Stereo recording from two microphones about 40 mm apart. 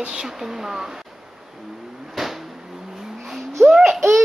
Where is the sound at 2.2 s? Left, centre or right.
Centre.